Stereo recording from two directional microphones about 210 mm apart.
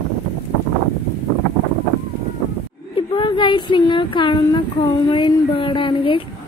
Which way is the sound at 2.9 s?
25° left (ahead or behind).